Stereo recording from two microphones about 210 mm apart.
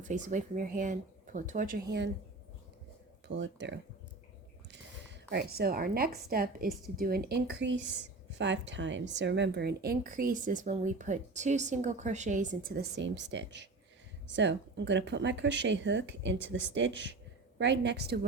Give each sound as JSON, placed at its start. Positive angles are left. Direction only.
{"t": 0.0, "sound": "speech", "side_deg": -35}
{"t": 3.2, "sound": "speech", "side_deg": -55}
{"t": 5.3, "sound": "speech", "side_deg": -50}